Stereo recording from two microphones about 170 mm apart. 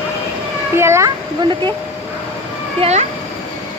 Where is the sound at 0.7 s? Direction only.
15° right (ahead or behind).